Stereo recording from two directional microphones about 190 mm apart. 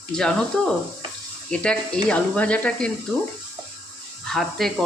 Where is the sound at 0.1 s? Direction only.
5° left (ahead or behind).